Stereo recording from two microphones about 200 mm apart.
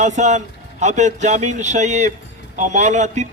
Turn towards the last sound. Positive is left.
turn(degrees=-35)  # may be behind; listen again after turning